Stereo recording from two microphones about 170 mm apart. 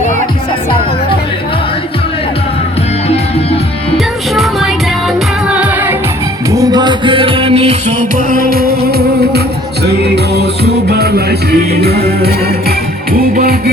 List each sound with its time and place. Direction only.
3.1 s music: 35° left (ahead or behind)
3.9 s music: centre (ahead or behind)
6.5 s music: 20° right (ahead or behind)
8.5 s music: 65° right (ahead or behind)